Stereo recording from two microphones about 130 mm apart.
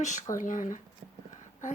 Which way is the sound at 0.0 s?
70° left (ahead or behind).